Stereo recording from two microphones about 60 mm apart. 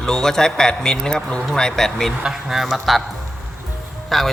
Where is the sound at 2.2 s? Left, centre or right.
Centre.